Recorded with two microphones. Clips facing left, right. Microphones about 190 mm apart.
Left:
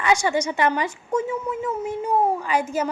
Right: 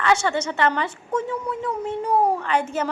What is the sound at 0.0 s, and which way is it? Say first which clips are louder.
A woman's voice: even; 10° left (ahead or behind).